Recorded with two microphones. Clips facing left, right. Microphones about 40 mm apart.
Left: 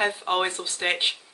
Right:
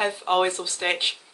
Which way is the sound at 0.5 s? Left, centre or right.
Centre.